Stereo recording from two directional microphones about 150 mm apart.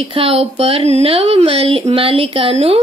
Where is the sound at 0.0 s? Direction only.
40° right (ahead or behind).